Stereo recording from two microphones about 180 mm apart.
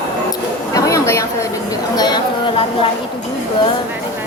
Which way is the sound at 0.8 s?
20° left (ahead or behind).